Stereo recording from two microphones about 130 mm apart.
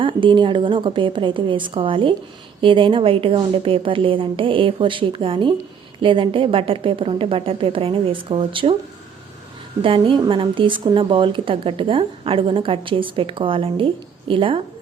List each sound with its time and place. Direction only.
0.0 s a woman's voice: 40° right (ahead or behind)
9.8 s a woman's voice: 40° right (ahead or behind)